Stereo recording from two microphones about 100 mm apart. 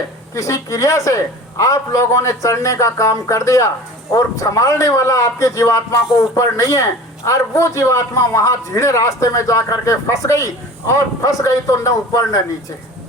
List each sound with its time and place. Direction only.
0.3 s a man's voice: 35° left (ahead or behind)